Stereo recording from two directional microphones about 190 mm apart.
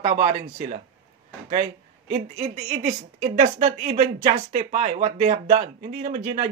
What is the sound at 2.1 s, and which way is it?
A woman's voice, 40° right (ahead or behind).